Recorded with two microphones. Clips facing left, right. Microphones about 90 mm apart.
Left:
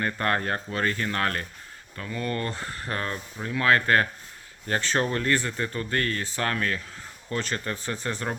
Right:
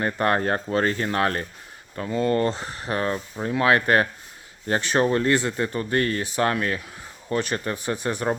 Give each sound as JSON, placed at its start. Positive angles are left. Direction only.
{"t": 0.0, "sound": "speech", "side_deg": -20}